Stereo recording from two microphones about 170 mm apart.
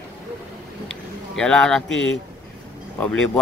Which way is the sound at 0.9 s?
5° left (ahead or behind).